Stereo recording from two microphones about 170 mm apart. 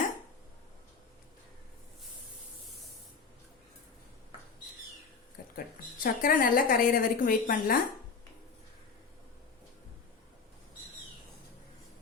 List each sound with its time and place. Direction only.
5.5 s a woman's voice: 55° left (ahead or behind)